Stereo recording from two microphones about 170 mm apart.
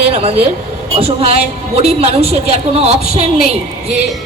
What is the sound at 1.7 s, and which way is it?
Speech, 35° right (ahead or behind).